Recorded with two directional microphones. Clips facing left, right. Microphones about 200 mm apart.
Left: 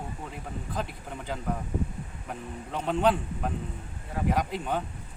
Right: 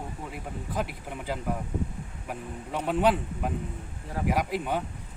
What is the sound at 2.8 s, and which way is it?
Speech, 5° right (ahead or behind).